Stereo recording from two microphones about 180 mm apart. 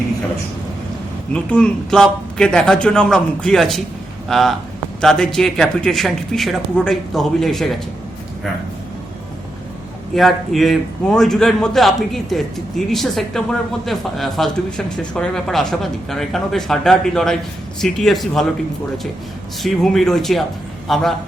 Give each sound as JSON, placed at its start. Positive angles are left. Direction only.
{"t": 1.3, "sound": "a man's voice", "side_deg": 5}
{"t": 10.2, "sound": "a man's voice", "side_deg": 0}
{"t": 19.6, "sound": "a man's voice", "side_deg": 0}